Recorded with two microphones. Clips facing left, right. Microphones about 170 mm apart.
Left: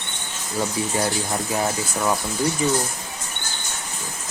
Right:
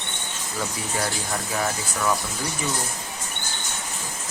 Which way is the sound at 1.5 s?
25° left (ahead or behind).